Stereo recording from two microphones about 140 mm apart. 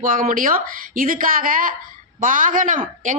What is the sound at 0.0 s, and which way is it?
Speech, 80° right.